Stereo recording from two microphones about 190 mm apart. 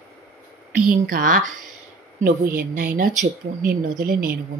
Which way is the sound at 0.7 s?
50° right (ahead or behind).